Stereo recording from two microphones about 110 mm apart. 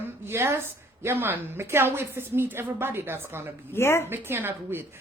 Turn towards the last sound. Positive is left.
turn(degrees=-20)  # may be behind; listen again after turning